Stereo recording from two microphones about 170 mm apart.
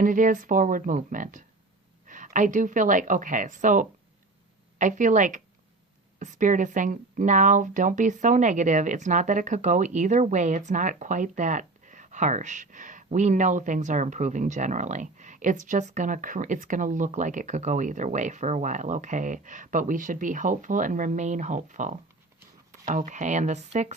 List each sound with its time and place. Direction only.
0.0 s speech: 50° right (ahead or behind)